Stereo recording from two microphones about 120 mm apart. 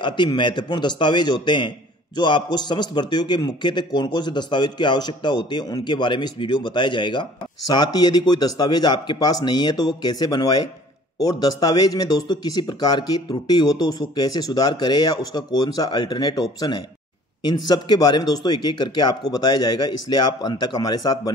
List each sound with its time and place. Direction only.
0.0 s a man's voice: 40° left (ahead or behind)